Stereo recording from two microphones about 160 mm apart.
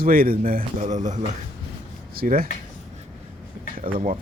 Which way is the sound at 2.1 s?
65° right (ahead or behind).